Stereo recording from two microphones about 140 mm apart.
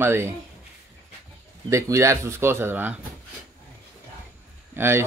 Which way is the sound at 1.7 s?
20° right (ahead or behind).